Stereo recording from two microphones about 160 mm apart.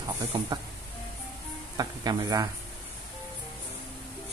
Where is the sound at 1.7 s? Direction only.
25° right (ahead or behind).